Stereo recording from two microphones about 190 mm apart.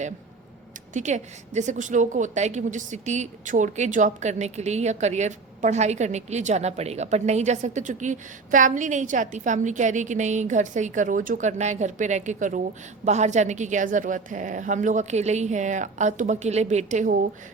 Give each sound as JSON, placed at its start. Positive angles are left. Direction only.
{"t": 0.9, "sound": "a woman's voice", "side_deg": -40}